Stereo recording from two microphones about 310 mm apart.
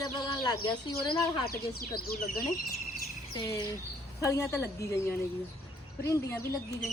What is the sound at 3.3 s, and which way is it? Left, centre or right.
Speech, centre.